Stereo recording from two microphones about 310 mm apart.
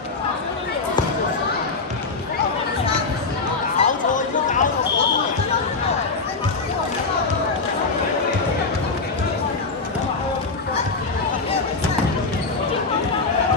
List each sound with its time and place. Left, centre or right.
3.8 s chatter: left